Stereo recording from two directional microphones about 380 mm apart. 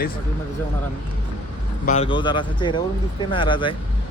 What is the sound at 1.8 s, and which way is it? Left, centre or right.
Speech, centre.